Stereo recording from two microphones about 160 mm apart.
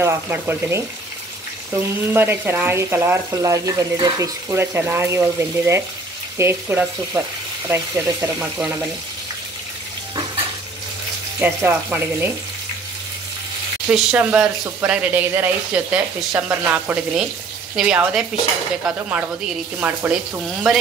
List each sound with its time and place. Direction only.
0.0 s speech: 15° right (ahead or behind)
11.4 s speech: 10° right (ahead or behind)
13.8 s speech: 5° right (ahead or behind)